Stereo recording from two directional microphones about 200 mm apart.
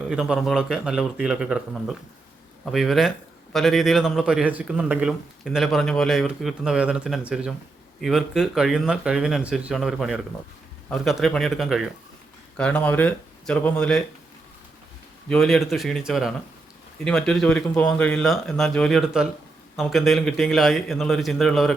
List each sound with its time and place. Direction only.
0.1 s a man's voice: 5° right (ahead or behind)
15.3 s a man's voice: centre (ahead or behind)